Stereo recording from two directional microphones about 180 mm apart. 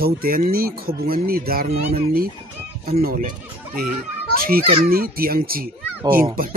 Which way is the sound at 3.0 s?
55° right (ahead or behind).